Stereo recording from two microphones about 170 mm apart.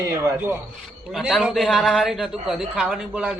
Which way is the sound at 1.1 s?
Centre (ahead or behind).